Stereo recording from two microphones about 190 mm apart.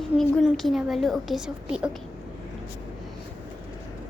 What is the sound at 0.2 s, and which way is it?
A woman's voice, centre (ahead or behind).